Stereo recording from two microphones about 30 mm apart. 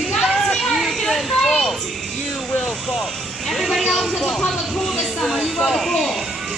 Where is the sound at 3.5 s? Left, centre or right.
Centre.